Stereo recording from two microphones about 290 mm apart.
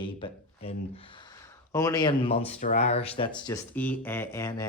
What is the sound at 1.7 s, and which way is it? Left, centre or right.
Speech, centre.